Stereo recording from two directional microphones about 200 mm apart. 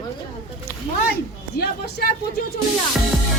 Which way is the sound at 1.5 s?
50° left (ahead or behind).